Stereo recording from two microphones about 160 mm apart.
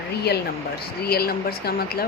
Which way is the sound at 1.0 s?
75° left (ahead or behind).